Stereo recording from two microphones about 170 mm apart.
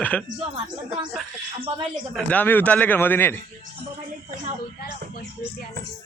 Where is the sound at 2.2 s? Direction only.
10° left (ahead or behind).